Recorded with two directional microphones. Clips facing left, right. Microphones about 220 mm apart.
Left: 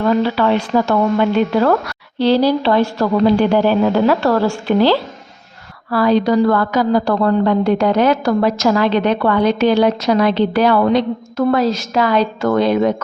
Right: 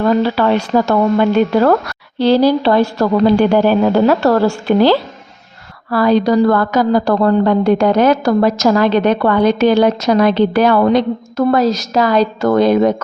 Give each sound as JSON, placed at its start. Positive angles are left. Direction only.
{"t": 0.0, "sound": "a woman's voice", "side_deg": -40}